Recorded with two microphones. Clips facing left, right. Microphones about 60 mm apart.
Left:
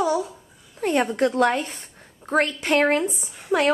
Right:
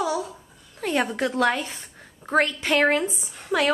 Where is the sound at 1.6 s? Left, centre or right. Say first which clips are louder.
Even; right.